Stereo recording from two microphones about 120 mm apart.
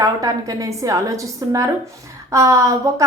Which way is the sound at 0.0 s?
30° right (ahead or behind).